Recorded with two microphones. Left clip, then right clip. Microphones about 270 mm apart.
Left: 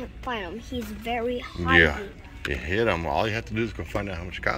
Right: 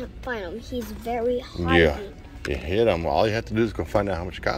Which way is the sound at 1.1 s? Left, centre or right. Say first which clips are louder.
Right 4 dB; left.